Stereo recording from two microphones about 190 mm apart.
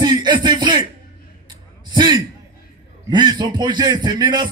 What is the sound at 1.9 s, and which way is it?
A man's voice, 20° right (ahead or behind).